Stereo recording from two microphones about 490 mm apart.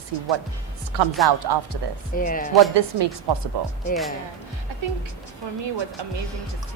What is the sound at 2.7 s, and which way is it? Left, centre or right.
Speech, right.